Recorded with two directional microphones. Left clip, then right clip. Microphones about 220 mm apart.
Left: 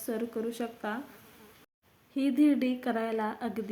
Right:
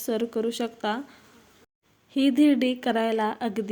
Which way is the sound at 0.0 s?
40° right (ahead or behind).